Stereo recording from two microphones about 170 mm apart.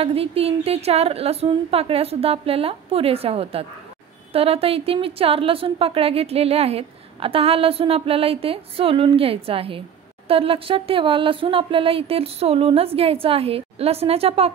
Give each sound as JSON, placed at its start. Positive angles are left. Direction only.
{"t": 0.0, "sound": "a woman's voice", "side_deg": -35}